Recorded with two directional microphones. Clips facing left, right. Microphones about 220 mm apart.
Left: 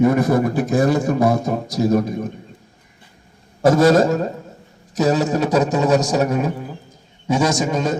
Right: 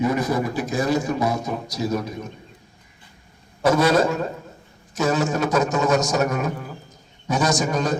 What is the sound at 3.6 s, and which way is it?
A man's voice, 45° left (ahead or behind).